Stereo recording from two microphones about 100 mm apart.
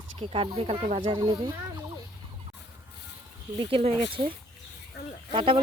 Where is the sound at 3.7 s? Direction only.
75° right (ahead or behind).